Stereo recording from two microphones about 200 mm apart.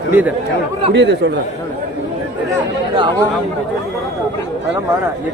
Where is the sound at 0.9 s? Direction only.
60° right (ahead or behind).